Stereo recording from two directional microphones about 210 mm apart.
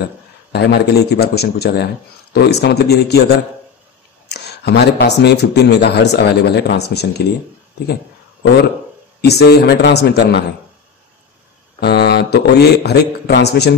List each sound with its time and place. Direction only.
0.5 s speech: 50° left (ahead or behind)
7.8 s a sound: 50° left (ahead or behind)
9.2 s speech: 50° left (ahead or behind)
11.8 s speech: 50° left (ahead or behind)